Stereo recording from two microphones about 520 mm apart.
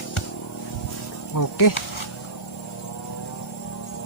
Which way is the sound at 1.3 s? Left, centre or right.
Left.